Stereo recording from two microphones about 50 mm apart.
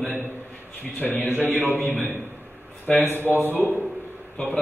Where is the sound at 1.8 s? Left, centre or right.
Left.